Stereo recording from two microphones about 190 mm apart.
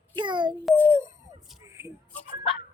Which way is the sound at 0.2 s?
25° right (ahead or behind).